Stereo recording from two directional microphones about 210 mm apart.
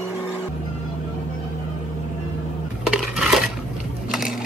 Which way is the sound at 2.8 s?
5° right (ahead or behind).